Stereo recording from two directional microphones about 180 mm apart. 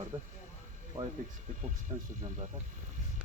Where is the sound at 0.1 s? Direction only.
25° right (ahead or behind).